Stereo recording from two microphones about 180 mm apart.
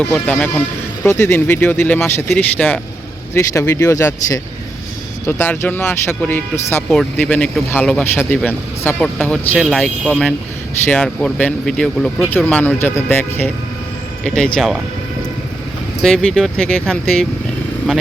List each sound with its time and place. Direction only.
0.0 s speech: 5° left (ahead or behind)
9.6 s speech: centre (ahead or behind)
16.0 s speech: centre (ahead or behind)